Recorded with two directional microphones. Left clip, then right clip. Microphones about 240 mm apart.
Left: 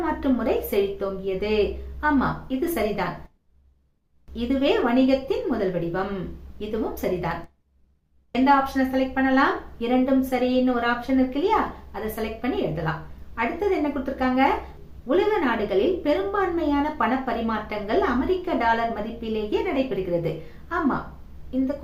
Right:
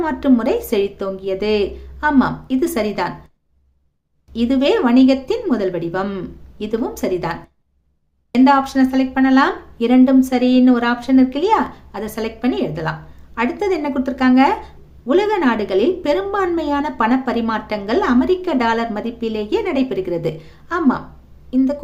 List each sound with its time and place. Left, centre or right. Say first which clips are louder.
0.0 s a woman's voice: right 7 dB; right
4.4 s a woman's voice: right 6 dB; right